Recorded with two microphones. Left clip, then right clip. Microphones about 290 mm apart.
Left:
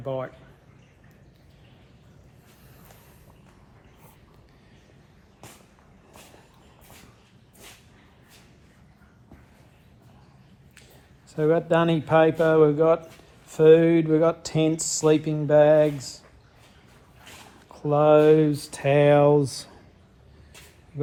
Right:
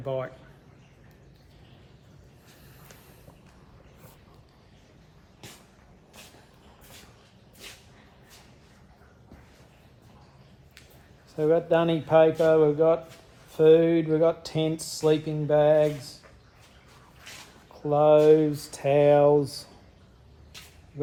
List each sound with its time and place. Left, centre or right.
0.0 s a man's voice: centre
11.3 s speech: left
17.7 s speech: left